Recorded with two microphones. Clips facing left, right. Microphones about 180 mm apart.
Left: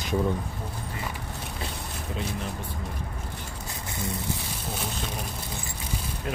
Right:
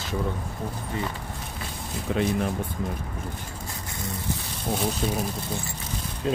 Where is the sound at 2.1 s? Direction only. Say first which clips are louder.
Right 9 dB; 70° right (ahead or behind).